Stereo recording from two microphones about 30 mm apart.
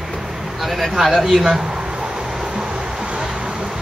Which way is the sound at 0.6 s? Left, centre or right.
Centre.